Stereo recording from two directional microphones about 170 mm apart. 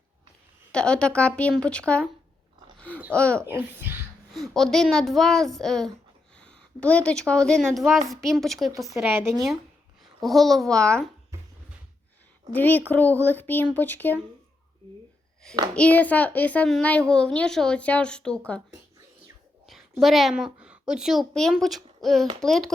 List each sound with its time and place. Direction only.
0.7 s speech: 5° left (ahead or behind)
2.7 s a sound: 10° left (ahead or behind)
3.1 s a child's voice: 5° left (ahead or behind)
3.4 s a child's voice: 10° right (ahead or behind)
4.3 s speech: centre (ahead or behind)
9.0 s a child's voice: 10° right (ahead or behind)
10.2 s speech: centre (ahead or behind)
12.5 s a child's voice: 10° left (ahead or behind)
15.7 s a child's voice: 10° left (ahead or behind)
19.6 s a woman's voice: centre (ahead or behind)